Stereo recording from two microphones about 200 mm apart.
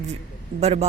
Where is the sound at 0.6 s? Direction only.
30° right (ahead or behind).